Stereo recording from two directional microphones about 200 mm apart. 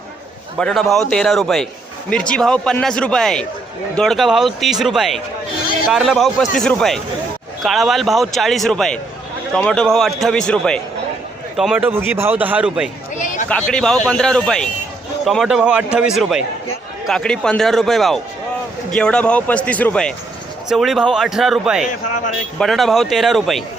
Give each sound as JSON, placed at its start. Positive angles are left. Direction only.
{"t": 0.6, "sound": "a man's voice", "side_deg": 0}
{"t": 13.1, "sound": "a sound", "side_deg": 40}
{"t": 13.5, "sound": "a man's voice", "side_deg": 5}